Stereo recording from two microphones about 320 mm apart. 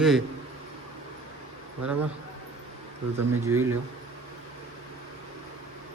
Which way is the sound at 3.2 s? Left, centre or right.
Right.